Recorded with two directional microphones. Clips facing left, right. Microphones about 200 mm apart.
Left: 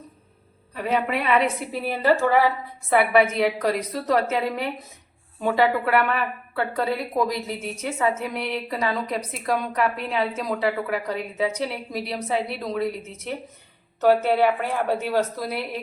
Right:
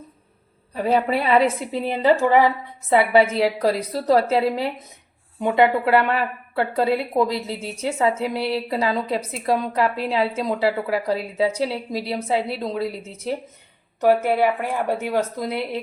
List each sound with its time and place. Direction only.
0.8 s a woman's voice: 35° right (ahead or behind); by 2.5 s 15° right (ahead or behind)
2.9 s a woman's voice: 25° right (ahead or behind)
14.0 s speech: 10° right (ahead or behind)